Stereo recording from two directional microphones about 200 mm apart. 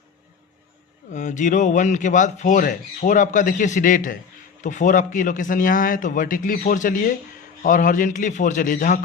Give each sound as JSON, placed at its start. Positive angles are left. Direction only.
{"t": 1.1, "sound": "speech", "side_deg": 40}